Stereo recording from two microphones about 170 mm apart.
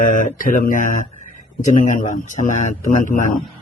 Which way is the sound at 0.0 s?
55° left (ahead or behind).